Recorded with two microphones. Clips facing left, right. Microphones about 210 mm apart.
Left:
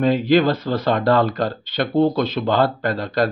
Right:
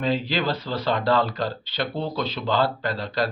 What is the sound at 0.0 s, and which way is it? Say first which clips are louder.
Speech: left 9 dB; 50° left (ahead or behind).